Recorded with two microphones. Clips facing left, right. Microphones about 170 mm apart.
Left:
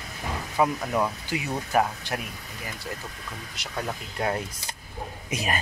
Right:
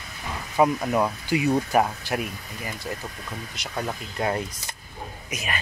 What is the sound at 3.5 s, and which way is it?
Speech, 15° right (ahead or behind).